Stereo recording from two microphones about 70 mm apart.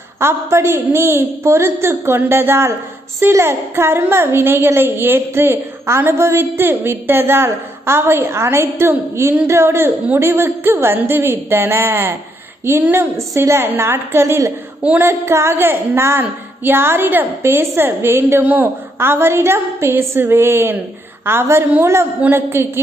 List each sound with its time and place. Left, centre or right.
0.2 s a woman's voice: right